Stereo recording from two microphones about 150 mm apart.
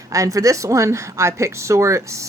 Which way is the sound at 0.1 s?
20° right (ahead or behind).